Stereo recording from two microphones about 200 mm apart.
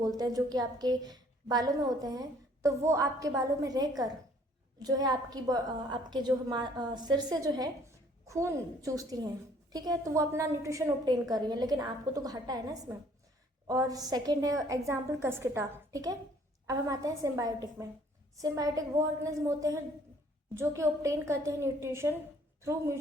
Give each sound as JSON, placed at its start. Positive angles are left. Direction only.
{"t": 0.2, "sound": "a woman's voice", "side_deg": -20}